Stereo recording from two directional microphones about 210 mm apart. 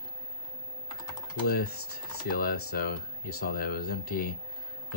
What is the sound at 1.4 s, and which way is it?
Speech, 50° left (ahead or behind).